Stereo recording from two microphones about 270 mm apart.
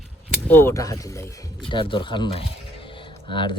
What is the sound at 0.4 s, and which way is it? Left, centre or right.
Speech, centre.